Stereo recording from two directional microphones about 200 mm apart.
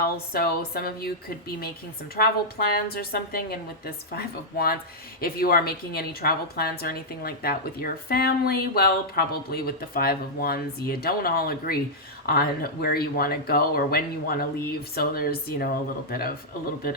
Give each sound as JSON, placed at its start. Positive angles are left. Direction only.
{"t": 0.0, "sound": "a woman's voice", "side_deg": 50}
{"t": 2.1, "sound": "a woman's voice", "side_deg": 50}